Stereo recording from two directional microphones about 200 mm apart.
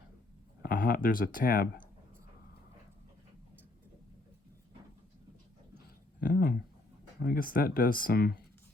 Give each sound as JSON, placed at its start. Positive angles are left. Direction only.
{"t": 0.6, "sound": "speech", "side_deg": 45}
{"t": 6.1, "sound": "a sound", "side_deg": 50}
{"t": 7.3, "sound": "speech", "side_deg": 45}